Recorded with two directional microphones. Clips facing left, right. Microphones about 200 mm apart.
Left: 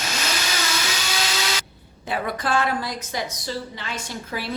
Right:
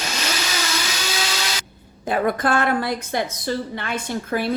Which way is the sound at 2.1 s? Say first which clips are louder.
Right 5 dB; 50° right (ahead or behind).